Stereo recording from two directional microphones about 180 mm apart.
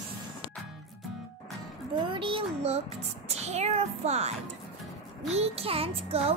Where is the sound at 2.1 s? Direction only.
30° right (ahead or behind).